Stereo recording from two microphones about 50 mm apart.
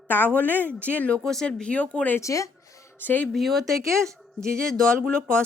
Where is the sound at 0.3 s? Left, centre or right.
Left.